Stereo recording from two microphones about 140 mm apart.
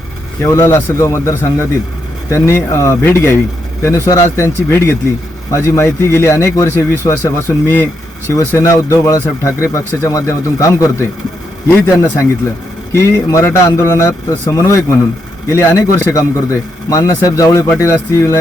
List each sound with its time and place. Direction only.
0.4 s a man's voice: 20° left (ahead or behind)
12.9 s a man's voice: 15° left (ahead or behind)